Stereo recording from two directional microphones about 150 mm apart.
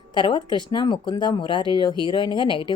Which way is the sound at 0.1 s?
30° left (ahead or behind).